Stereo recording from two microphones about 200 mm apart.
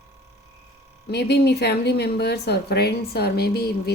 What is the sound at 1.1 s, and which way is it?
A woman's voice, 55° left (ahead or behind).